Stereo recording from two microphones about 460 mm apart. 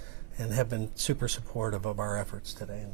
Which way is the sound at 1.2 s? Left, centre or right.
Right.